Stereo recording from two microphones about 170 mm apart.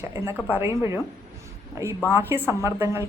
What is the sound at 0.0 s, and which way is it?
Speech, 15° right (ahead or behind).